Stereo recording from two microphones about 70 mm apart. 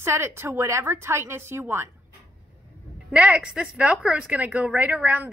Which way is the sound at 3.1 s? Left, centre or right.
Centre.